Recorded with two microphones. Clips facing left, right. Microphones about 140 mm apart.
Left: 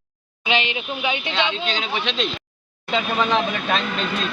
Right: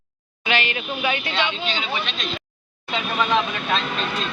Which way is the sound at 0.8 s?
15° left (ahead or behind).